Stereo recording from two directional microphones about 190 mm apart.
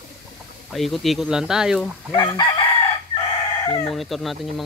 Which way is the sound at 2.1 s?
25° left (ahead or behind).